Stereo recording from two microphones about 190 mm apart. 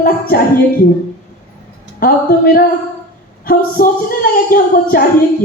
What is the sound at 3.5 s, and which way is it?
A woman's voice, 50° left (ahead or behind).